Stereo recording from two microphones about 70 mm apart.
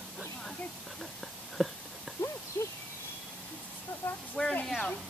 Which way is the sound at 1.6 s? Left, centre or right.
Centre.